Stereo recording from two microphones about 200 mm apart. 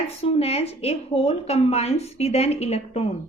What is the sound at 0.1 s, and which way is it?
A woman's voice, 30° left (ahead or behind).